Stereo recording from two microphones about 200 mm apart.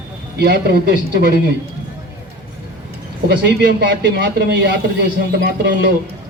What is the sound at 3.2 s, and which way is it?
A man's voice, 55° right (ahead or behind).